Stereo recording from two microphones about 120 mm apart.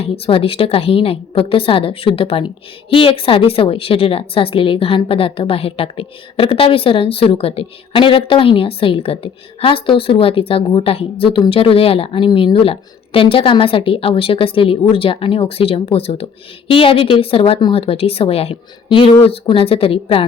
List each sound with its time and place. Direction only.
0.0 s a woman's voice: 50° left (ahead or behind)